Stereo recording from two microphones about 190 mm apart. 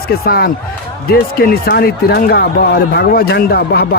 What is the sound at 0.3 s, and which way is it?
Speech, 55° left (ahead or behind).